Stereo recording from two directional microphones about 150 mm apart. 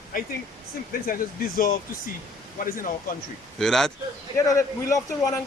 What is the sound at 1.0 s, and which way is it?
Speech, 75° left (ahead or behind).